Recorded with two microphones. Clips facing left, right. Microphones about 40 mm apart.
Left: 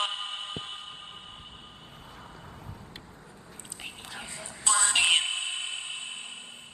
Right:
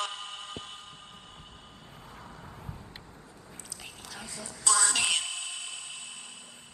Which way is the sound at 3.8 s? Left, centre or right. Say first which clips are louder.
Left 4 dB; left.